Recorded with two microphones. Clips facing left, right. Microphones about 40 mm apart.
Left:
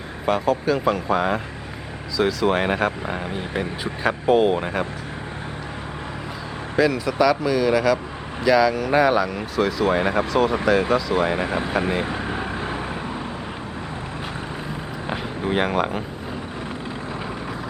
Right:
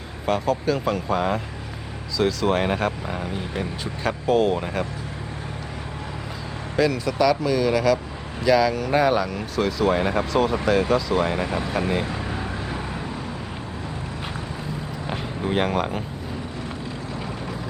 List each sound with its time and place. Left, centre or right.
0.3 s speech: centre
6.7 s speech: centre
11.4 s speech: left
12.0 s vehicle: left
15.0 s a sound: centre